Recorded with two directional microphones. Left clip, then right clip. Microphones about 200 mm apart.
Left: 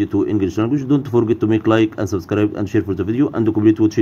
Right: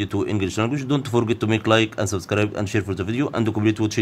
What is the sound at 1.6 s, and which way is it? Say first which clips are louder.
Speech: left 3 dB; 25° right (ahead or behind).